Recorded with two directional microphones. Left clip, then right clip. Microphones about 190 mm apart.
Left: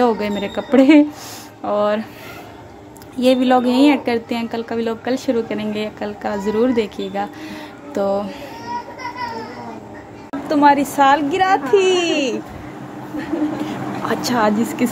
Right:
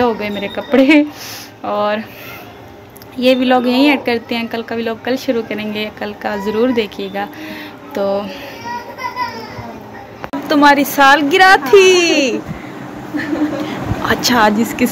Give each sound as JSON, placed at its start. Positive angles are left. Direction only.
{"t": 0.0, "sound": "a woman's voice", "side_deg": 25}
{"t": 3.2, "sound": "a woman's voice", "side_deg": 20}
{"t": 10.5, "sound": "a woman's voice", "side_deg": 0}
{"t": 13.7, "sound": "speech", "side_deg": 0}